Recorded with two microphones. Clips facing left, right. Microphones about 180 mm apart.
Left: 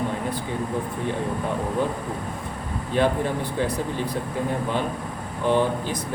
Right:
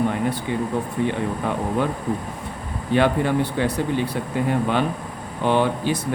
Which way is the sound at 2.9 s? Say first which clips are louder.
Right 4 dB; 75° right (ahead or behind).